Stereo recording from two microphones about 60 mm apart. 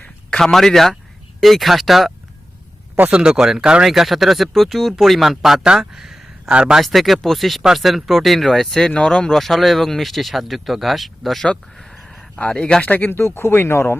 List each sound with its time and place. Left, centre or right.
0.3 s speech: centre
3.1 s speech: centre
5.6 s speech: centre
5.9 s a sound: centre
6.5 s speech: centre
6.8 s speech: centre
12.4 s speech: centre
13.1 s speech: left